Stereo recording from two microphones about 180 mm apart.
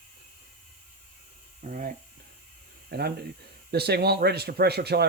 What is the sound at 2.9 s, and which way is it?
Speech, 60° right (ahead or behind).